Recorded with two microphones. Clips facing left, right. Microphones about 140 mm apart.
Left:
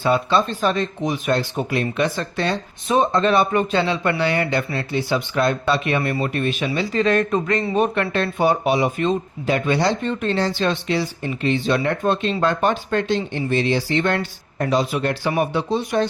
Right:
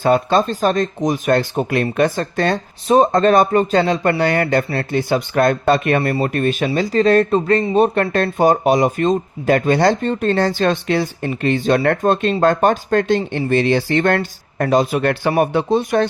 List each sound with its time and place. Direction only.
0.0 s speech: 45° right (ahead or behind)
10.3 s speech: 50° right (ahead or behind)